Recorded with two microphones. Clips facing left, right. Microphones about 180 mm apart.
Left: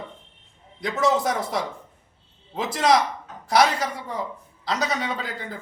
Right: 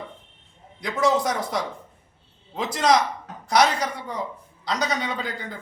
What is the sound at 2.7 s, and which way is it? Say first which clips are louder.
A man's voice: even; 5° left (ahead or behind).